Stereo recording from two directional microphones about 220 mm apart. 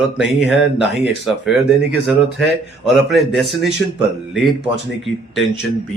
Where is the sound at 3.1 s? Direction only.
Centre (ahead or behind).